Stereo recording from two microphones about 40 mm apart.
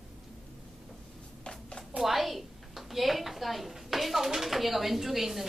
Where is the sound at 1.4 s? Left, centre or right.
Left.